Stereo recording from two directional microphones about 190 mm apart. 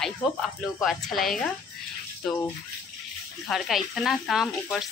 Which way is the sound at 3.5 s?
Centre (ahead or behind).